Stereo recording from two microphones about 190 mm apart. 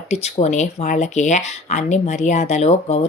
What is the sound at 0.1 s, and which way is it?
Speech, 35° left (ahead or behind).